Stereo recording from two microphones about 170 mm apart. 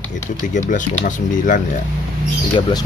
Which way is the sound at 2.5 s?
25° left (ahead or behind).